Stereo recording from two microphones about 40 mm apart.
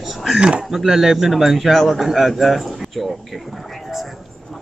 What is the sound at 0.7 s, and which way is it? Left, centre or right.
A man's voice, centre.